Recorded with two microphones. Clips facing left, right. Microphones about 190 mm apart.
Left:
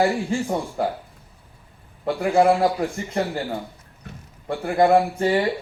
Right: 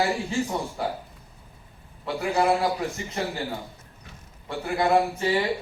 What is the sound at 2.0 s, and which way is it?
Speech, 50° left (ahead or behind).